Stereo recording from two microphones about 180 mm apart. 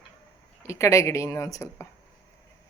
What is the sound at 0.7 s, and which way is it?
Speech, 15° left (ahead or behind).